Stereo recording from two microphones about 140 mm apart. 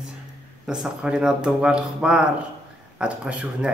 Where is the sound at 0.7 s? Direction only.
5° right (ahead or behind).